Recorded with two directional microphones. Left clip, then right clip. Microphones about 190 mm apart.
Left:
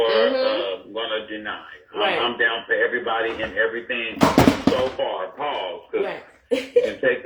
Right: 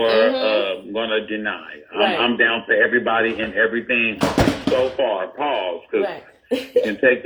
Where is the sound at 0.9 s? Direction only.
40° right (ahead or behind).